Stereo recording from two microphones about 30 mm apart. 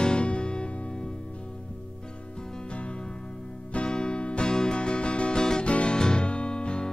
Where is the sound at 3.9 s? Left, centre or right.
Left.